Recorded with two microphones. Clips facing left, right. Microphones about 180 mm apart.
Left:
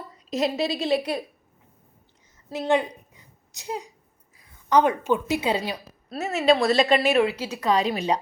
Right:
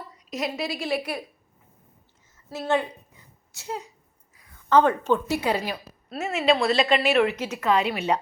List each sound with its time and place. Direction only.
0.3 s a woman's voice: 25° left (ahead or behind)
2.5 s speech: 15° left (ahead or behind)
6.1 s a woman's voice: 40° left (ahead or behind)
7.2 s speech: 10° left (ahead or behind)
7.5 s a woman's voice: 35° left (ahead or behind)